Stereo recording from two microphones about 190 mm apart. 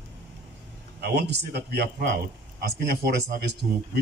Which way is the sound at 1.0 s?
60° right (ahead or behind).